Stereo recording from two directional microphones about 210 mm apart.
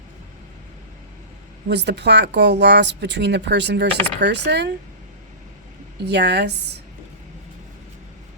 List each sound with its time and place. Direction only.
1.6 s speech: 55° right (ahead or behind)
6.1 s a woman's voice: 55° right (ahead or behind)